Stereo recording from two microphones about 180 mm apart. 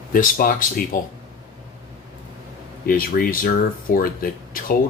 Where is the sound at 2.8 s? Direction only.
55° left (ahead or behind).